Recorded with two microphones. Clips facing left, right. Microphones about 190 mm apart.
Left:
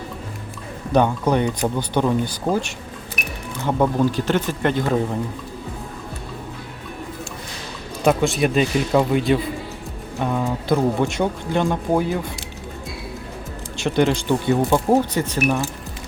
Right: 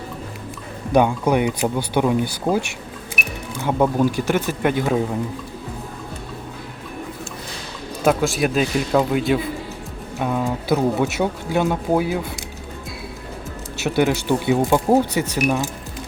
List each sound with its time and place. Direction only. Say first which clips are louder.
0.9 s speech: right 1 dB; 10° right (ahead or behind)
8.0 s speech: even; centre (ahead or behind)
13.7 s speech: even; 5° right (ahead or behind)